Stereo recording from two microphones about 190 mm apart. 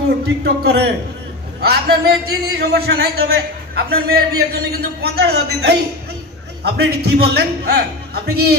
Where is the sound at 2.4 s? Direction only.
60° right (ahead or behind).